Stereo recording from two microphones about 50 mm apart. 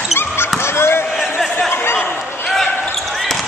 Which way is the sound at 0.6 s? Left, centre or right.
Left.